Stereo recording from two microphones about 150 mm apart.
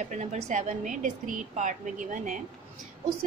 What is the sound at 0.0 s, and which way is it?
A woman's voice, 50° right (ahead or behind).